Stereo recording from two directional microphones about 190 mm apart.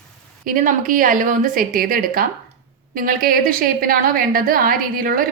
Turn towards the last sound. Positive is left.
turn(degrees=-50)  # may be behind; listen again after turning